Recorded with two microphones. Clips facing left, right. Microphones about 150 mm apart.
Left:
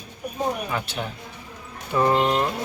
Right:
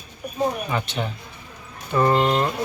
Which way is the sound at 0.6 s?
5° left (ahead or behind).